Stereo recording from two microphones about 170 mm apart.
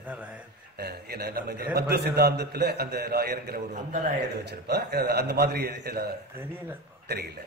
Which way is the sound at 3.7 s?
45° right (ahead or behind).